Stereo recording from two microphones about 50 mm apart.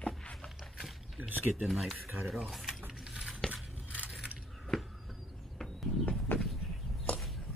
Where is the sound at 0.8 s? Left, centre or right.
Centre.